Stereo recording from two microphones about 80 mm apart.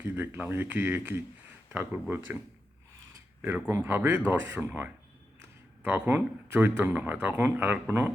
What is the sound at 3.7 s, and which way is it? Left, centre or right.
Speech, right.